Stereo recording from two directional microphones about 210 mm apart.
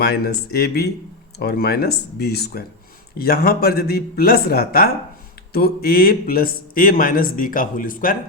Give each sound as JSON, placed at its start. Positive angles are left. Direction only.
{"t": 0.0, "sound": "a man's voice", "side_deg": 50}